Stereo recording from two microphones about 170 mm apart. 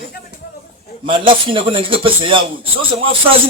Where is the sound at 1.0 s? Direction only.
30° right (ahead or behind).